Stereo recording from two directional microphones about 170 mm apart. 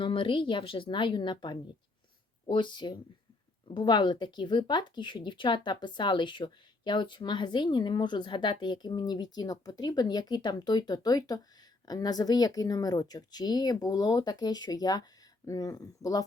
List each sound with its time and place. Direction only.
0.0 s speech: 30° left (ahead or behind)